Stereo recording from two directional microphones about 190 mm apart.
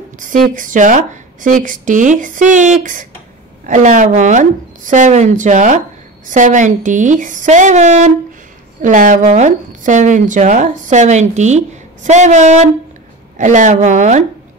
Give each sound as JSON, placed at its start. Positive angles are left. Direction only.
{"t": 0.2, "sound": "speech", "side_deg": -45}